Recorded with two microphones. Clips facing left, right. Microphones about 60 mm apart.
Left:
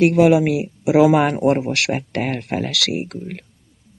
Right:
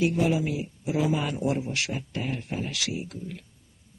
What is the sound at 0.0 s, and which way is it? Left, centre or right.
Speech, left.